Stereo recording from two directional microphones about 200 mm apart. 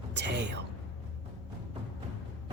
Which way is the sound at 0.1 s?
60° right (ahead or behind).